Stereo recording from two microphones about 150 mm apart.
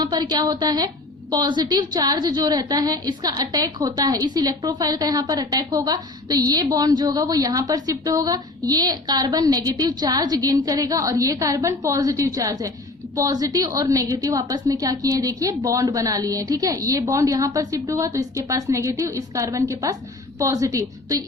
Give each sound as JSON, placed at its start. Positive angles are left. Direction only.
{"t": 0.0, "sound": "a woman's voice", "side_deg": -25}